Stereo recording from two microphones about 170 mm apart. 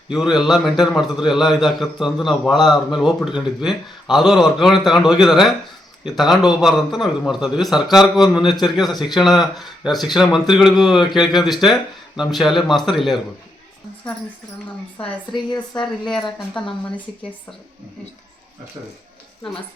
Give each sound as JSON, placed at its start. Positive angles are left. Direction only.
{"t": 0.1, "sound": "a man's voice", "side_deg": -5}
{"t": 14.9, "sound": "speech", "side_deg": 30}
{"t": 15.8, "sound": "a man's voice", "side_deg": 0}